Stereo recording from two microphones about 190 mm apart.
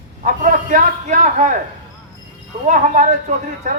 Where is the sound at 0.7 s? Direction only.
45° right (ahead or behind).